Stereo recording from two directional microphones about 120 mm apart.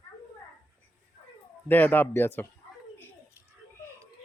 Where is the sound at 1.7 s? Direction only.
15° left (ahead or behind).